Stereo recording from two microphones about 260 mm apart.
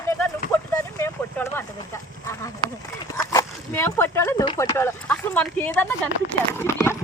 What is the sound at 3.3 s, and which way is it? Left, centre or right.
Speech, centre.